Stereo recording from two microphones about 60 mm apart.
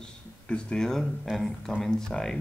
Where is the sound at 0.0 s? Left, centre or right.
Centre.